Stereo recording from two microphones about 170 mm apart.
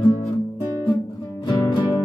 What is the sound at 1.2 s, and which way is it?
Music, 30° left (ahead or behind).